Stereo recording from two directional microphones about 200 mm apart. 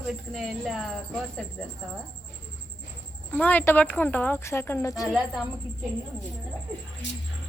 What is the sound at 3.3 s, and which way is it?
Speech, 10° left (ahead or behind).